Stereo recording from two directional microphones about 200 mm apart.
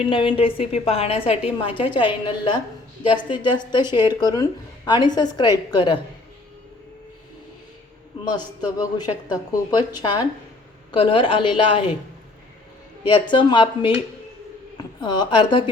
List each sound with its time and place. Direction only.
0.0 s a man's voice: 25° left (ahead or behind)
8.2 s a man's voice: 20° left (ahead or behind)
13.1 s a man's voice: 25° left (ahead or behind)
15.0 s a man's voice: 20° left (ahead or behind)